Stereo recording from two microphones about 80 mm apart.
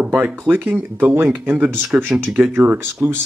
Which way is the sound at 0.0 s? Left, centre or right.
Centre.